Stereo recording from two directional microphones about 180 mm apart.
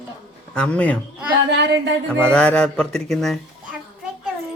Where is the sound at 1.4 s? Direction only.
75° right (ahead or behind).